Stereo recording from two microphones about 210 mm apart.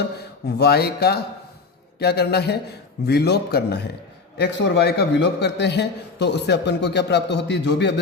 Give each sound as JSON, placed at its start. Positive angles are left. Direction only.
{"t": 0.4, "sound": "a man's voice", "side_deg": 50}